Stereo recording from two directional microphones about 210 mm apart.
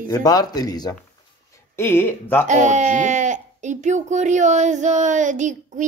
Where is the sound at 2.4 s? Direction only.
35° right (ahead or behind).